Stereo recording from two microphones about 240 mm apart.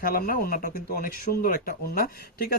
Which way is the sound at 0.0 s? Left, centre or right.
Left.